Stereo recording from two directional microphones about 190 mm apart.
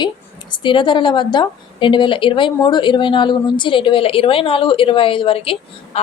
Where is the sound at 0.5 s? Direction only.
25° left (ahead or behind).